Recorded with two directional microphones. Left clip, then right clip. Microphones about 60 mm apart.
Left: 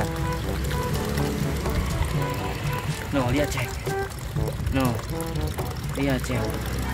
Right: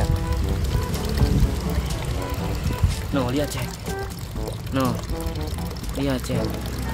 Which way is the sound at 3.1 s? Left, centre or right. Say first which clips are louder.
Right 1 dB; right.